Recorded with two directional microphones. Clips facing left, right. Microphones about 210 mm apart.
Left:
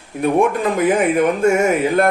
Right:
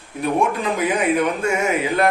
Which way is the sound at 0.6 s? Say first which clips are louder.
Left 5 dB; 50° left (ahead or behind).